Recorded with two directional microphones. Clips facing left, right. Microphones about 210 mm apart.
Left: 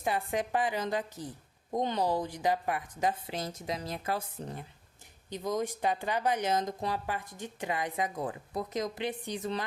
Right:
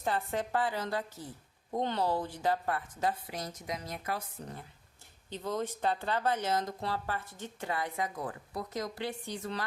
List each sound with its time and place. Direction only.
0.0 s speech: 15° left (ahead or behind)
5.3 s speech: 15° left (ahead or behind)